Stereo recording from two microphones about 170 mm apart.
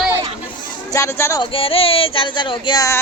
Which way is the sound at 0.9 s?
15° left (ahead or behind).